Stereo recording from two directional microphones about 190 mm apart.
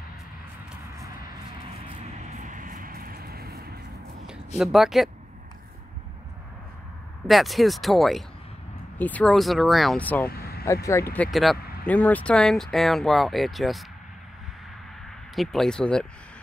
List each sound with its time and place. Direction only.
2.0 s vehicle: 40° right (ahead or behind); by 3.8 s 55° right (ahead or behind)
4.6 s speech: centre (ahead or behind)
7.2 s speech: centre (ahead or behind)
10.3 s vehicle: 55° left (ahead or behind)
10.6 s speech: 15° left (ahead or behind)
11.2 s speech: centre (ahead or behind)
15.3 s speech: centre (ahead or behind)